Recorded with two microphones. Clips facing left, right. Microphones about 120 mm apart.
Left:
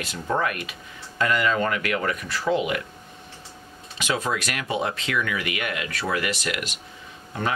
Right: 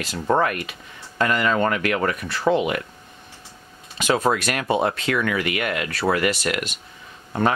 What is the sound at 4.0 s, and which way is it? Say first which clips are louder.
Speech: right 6 dB; 50° right (ahead or behind).